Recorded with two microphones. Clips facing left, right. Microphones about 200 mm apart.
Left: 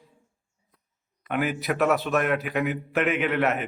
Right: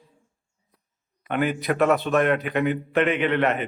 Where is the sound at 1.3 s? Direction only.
5° left (ahead or behind).